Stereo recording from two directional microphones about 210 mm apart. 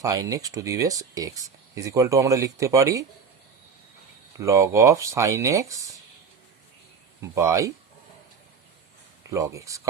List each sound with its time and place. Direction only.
0.0 s speech: 15° right (ahead or behind)
4.4 s speech: 15° right (ahead or behind)
7.2 s speech: 15° right (ahead or behind)
9.3 s speech: 15° right (ahead or behind)